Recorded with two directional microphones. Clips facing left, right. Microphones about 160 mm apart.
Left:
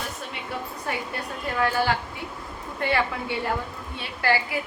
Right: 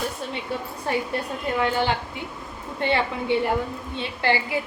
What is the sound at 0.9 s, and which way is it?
A woman's voice, 30° right (ahead or behind).